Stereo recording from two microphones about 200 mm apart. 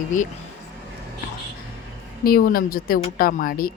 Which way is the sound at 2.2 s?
45° left (ahead or behind).